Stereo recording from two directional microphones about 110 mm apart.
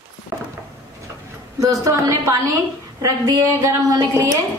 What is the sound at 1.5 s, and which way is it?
A woman's voice, 30° right (ahead or behind).